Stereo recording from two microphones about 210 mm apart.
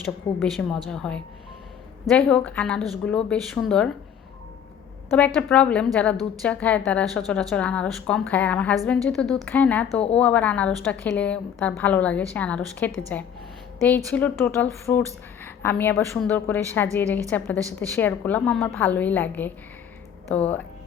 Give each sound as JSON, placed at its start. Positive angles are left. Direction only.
{"t": 0.3, "sound": "a woman's voice", "side_deg": 0}
{"t": 5.1, "sound": "a woman's voice", "side_deg": 5}
{"t": 9.9, "sound": "speech", "side_deg": 30}
{"t": 10.2, "sound": "a woman's voice", "side_deg": 5}